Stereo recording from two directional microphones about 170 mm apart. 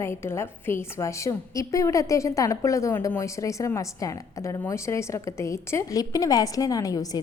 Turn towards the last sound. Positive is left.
turn(degrees=20)  # may be behind; listen again after turning